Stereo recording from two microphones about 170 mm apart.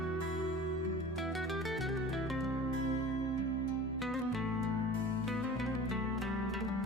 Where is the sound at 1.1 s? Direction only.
Centre (ahead or behind).